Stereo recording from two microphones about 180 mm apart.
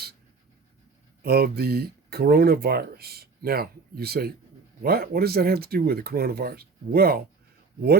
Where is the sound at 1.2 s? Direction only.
60° right (ahead or behind).